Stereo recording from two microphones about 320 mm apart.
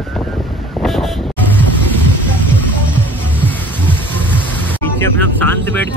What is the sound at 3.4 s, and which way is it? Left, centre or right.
Music, centre.